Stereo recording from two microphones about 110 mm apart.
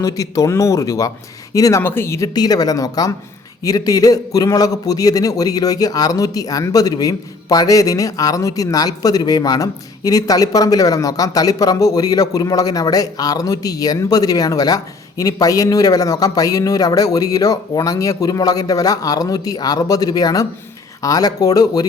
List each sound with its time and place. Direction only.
0.0 s a man's voice: 30° left (ahead or behind)
1.8 s a man's voice: 20° left (ahead or behind)